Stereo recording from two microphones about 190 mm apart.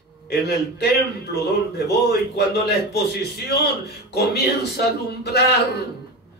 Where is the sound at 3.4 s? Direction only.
60° left (ahead or behind).